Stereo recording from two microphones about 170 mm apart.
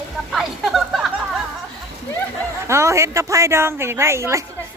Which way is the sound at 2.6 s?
15° right (ahead or behind).